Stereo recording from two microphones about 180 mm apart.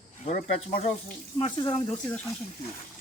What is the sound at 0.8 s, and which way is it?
Speech, 40° left (ahead or behind).